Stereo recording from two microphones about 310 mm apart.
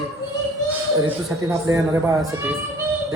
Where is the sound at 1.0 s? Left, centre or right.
Centre.